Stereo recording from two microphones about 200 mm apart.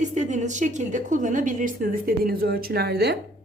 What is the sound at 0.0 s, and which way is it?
A woman's voice, 35° right (ahead or behind).